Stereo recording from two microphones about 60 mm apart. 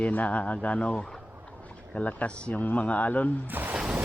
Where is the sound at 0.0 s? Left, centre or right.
Left.